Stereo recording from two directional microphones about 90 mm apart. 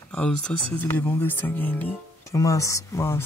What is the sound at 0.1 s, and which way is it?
Speech, 15° left (ahead or behind).